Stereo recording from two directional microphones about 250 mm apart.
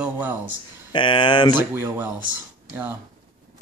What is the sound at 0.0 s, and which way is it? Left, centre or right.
Speech, centre.